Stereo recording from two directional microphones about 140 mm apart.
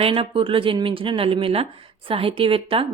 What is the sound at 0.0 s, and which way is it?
A woman's voice, 40° right (ahead or behind).